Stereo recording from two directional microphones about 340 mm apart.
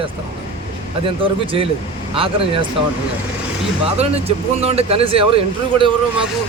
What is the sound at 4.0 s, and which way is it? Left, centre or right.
Speech, centre.